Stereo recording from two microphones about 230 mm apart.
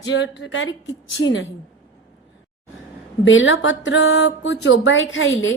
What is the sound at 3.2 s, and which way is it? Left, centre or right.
A woman's voice, left.